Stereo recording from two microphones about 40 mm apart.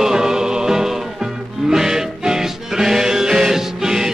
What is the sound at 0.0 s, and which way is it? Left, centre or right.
Music, centre.